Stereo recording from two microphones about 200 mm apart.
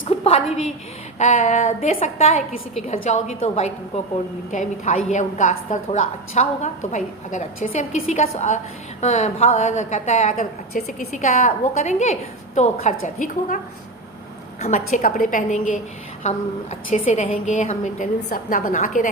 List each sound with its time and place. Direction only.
0.1 s a sound: 35° left (ahead or behind)
1.2 s a woman's voice: 35° left (ahead or behind)
14.6 s a woman's voice: 40° left (ahead or behind)
18.2 s a woman's voice: 50° left (ahead or behind)